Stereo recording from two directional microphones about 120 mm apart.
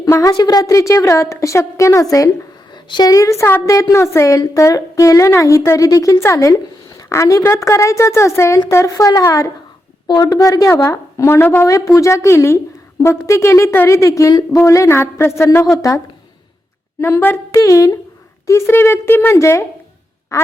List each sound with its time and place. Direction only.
0.0 s a woman's voice: 30° left (ahead or behind)
17.0 s a woman's voice: 20° left (ahead or behind)